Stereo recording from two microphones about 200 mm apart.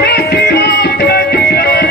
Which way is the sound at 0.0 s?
55° left (ahead or behind).